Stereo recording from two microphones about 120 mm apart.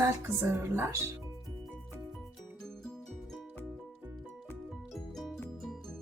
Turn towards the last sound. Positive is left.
turn(degrees=0)  # may be behind; listen again after turning